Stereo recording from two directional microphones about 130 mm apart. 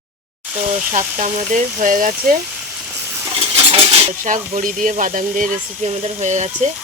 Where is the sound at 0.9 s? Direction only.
75° right (ahead or behind); by 2.4 s 90° right.